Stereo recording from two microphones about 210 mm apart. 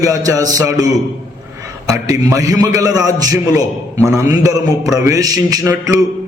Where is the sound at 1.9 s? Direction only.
15° right (ahead or behind).